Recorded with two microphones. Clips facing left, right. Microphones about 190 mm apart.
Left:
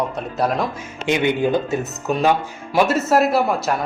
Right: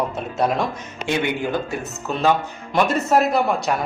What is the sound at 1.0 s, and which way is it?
Speech, 20° left (ahead or behind).